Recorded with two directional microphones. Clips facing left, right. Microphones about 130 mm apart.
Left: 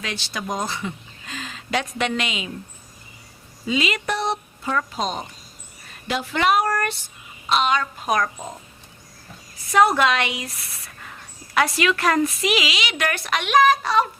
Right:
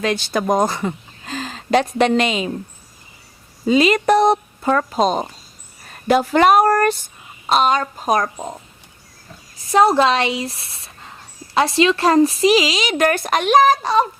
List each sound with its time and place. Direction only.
0.0 s speech: 50° right (ahead or behind)
3.7 s speech: 40° right (ahead or behind)
9.7 s a woman's voice: 30° right (ahead or behind)